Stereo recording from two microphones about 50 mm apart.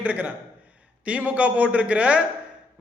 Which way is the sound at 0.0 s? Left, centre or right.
Right.